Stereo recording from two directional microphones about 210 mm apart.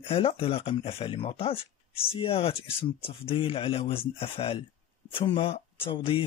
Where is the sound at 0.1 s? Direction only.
25° left (ahead or behind).